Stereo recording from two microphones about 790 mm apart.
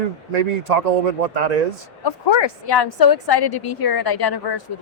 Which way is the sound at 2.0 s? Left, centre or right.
Left.